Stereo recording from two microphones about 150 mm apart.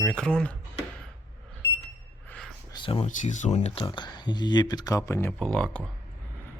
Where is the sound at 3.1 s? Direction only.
55° left (ahead or behind); by 5.3 s 20° left (ahead or behind).